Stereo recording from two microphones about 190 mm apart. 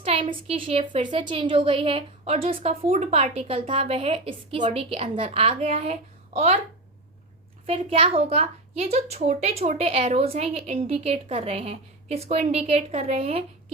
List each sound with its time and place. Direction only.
0.0 s a woman's voice: 30° right (ahead or behind)
7.7 s a woman's voice: 30° right (ahead or behind)